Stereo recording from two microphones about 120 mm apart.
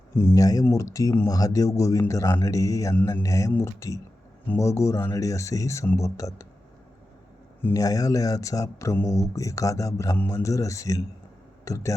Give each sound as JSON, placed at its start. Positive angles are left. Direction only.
{"t": 0.1, "sound": "speech", "side_deg": 20}
{"t": 7.6, "sound": "speech", "side_deg": 30}